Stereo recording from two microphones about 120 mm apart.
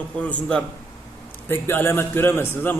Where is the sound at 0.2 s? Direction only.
10° left (ahead or behind).